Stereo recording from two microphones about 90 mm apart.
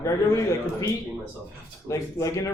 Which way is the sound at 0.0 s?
35° left (ahead or behind).